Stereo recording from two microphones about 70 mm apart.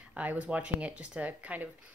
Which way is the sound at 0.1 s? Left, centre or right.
Right.